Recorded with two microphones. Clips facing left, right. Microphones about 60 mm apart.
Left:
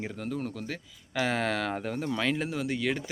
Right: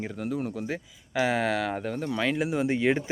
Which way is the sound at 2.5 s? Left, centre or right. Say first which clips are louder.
Right 6 dB; right.